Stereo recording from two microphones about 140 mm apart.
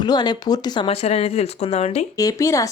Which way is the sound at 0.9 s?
45° left (ahead or behind).